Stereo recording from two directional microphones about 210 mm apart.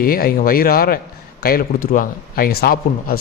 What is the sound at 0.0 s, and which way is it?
A man's voice, 45° left (ahead or behind).